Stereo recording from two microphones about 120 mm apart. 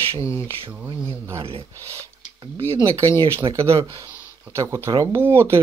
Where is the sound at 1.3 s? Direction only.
50° right (ahead or behind).